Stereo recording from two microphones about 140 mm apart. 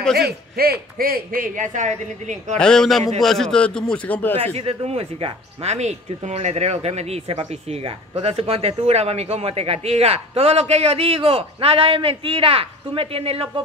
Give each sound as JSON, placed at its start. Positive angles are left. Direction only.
{"t": 0.2, "sound": "a man's voice", "side_deg": -90}
{"t": 2.6, "sound": "a man's voice", "side_deg": 5}
{"t": 4.6, "sound": "speech", "side_deg": -45}